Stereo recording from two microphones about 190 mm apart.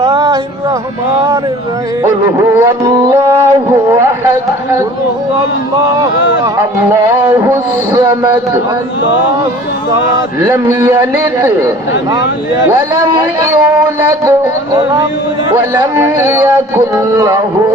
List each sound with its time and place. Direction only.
0.0 s a sound: 15° right (ahead or behind)
2.4 s speech: 10° right (ahead or behind)
3.1 s a sound: 15° right (ahead or behind)
6.6 s speech: 15° right (ahead or behind)
10.4 s speech: 15° right (ahead or behind)
13.4 s music: 15° right (ahead or behind)
15.5 s speech: 15° right (ahead or behind)